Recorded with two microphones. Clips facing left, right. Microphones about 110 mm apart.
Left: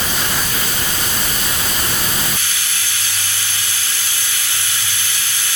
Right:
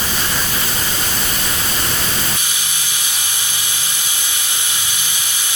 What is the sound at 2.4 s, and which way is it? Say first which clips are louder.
Steam: even; 20° right (ahead or behind).